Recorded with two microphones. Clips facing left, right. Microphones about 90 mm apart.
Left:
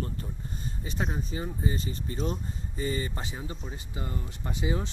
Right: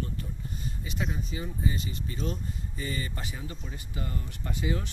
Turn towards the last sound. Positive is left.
turn(degrees=25)  # may be behind; listen again after turning